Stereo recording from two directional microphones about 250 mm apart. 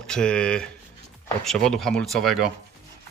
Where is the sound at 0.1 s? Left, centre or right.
Centre.